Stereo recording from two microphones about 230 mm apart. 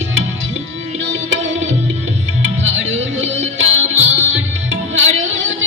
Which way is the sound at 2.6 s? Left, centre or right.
Right.